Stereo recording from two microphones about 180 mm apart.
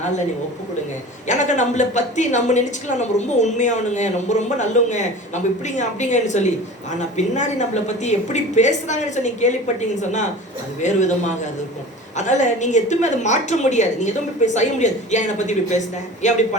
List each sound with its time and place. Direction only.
1.3 s a woman's voice: 40° left (ahead or behind)